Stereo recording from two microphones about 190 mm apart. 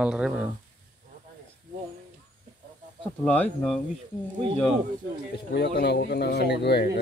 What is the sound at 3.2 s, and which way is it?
Speech, 5° left (ahead or behind).